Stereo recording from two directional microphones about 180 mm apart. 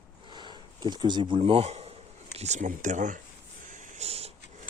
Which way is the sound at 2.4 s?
40° right (ahead or behind).